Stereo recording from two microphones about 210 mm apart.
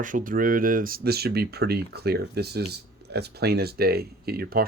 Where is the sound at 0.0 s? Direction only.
40° right (ahead or behind).